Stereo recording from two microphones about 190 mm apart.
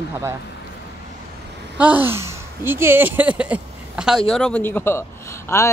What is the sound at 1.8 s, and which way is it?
Speech, 10° right (ahead or behind).